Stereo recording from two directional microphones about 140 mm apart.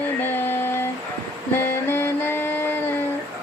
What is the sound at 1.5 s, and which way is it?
Music, 15° left (ahead or behind).